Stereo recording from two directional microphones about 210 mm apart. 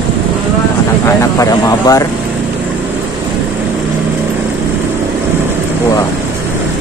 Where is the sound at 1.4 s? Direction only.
15° left (ahead or behind).